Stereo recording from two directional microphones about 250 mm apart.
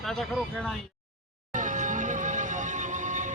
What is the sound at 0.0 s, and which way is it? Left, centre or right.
Speech, centre.